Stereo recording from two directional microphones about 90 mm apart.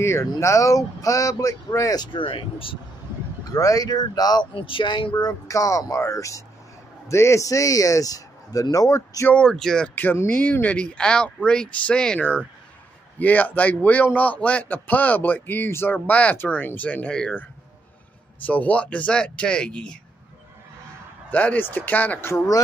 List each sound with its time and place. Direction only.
0.0 s speech: 30° left (ahead or behind)
2.0 s speech: 70° left (ahead or behind)
3.5 s speech: 40° left (ahead or behind)
4.6 s speech: 75° left (ahead or behind); by 9.3 s 40° left (ahead or behind)
9.3 s speech: 10° left (ahead or behind)
10.2 s a man's voice: 20° left (ahead or behind)
18.4 s speech: 15° left (ahead or behind)
21.3 s a man's voice: 15° left (ahead or behind)